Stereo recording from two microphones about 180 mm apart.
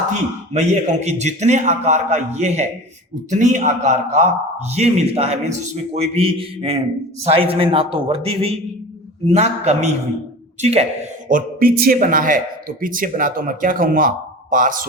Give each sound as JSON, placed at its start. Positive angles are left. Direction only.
{"t": 0.1, "sound": "a man's voice", "side_deg": -40}
{"t": 11.3, "sound": "a man's voice", "side_deg": -50}